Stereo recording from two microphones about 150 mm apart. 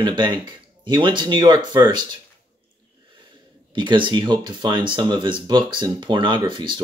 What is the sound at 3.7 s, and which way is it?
Speech, 35° right (ahead or behind).